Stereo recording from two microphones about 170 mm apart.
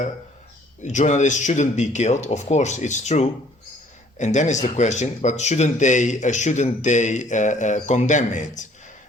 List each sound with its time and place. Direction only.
0.8 s speech: 45° left (ahead or behind)